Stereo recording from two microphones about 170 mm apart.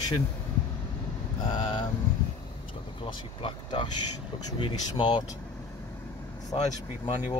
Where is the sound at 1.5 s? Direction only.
30° left (ahead or behind).